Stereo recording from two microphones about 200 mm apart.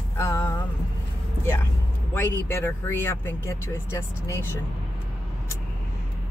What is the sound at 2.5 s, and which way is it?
Speech, 15° left (ahead or behind).